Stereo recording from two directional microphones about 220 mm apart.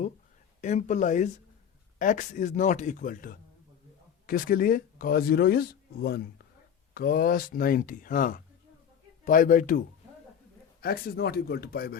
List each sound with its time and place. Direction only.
0.6 s speech: 35° left (ahead or behind)